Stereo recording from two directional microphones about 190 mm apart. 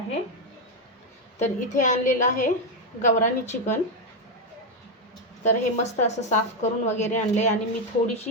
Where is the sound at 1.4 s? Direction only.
40° left (ahead or behind).